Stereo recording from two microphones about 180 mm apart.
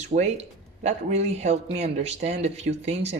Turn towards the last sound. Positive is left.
turn(degrees=-40)  # may be behind; listen again after turning